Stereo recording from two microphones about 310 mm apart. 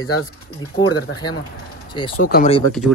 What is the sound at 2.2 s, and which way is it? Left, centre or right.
Speech, left.